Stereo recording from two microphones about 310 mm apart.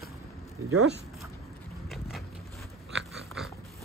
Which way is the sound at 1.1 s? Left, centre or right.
Centre.